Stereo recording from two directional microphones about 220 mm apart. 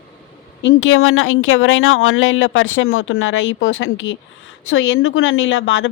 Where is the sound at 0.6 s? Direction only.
65° left (ahead or behind).